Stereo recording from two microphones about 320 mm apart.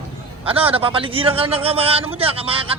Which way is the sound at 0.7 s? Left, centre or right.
Centre.